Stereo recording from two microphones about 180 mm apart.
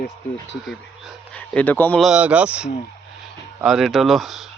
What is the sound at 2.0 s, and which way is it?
Speech, 5° right (ahead or behind).